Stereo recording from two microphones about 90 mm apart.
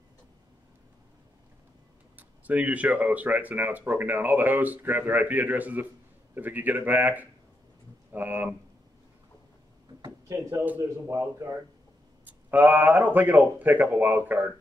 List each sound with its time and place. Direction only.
2.1 s speech: 15° right (ahead or behind)
10.2 s speech: 35° right (ahead or behind)
12.3 s speech: 20° right (ahead or behind)